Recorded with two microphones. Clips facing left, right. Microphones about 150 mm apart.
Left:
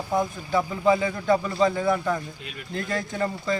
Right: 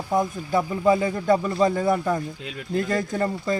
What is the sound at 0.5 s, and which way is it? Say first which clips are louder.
A man's voice: right 1 dB; 40° right (ahead or behind).